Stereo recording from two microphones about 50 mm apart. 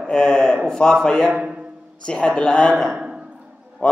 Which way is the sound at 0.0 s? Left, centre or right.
Centre.